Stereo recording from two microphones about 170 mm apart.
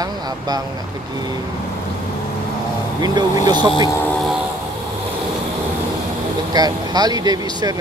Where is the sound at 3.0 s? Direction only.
20° right (ahead or behind).